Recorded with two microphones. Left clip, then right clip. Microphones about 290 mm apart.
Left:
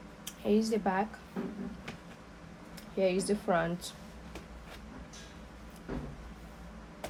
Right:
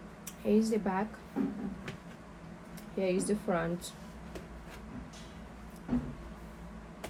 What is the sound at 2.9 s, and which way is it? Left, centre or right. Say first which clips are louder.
Speech: left 2 dB; centre.